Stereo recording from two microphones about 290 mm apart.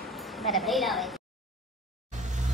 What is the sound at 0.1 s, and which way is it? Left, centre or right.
A woman's voice, centre.